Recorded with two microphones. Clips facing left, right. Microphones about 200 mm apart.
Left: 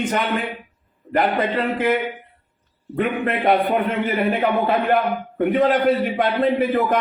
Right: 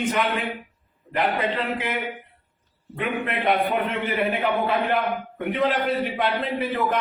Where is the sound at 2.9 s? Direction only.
45° left (ahead or behind).